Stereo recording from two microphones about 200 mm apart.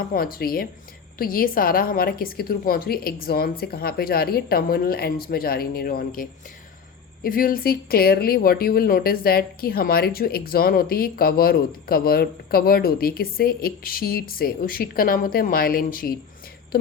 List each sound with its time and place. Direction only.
0.0 s speech: 45° left (ahead or behind)